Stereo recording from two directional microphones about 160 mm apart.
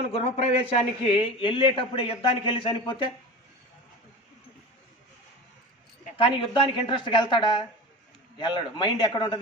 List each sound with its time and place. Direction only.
0.1 s a man's voice: 40° left (ahead or behind)
6.1 s a man's voice: 30° left (ahead or behind)